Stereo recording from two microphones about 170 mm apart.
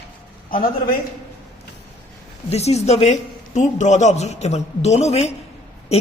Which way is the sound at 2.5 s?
40° left (ahead or behind).